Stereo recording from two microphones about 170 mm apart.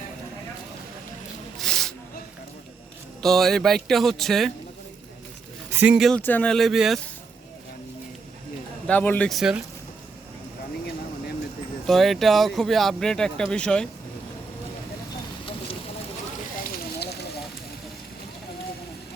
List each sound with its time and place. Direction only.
1.5 s snake: centre (ahead or behind)
3.2 s speech: centre (ahead or behind)
5.7 s speech: 10° right (ahead or behind)
6.1 s speech: 10° left (ahead or behind)
8.9 s speech: 10° left (ahead or behind)
11.9 s speech: centre (ahead or behind)
16.6 s a sound: 60° left (ahead or behind)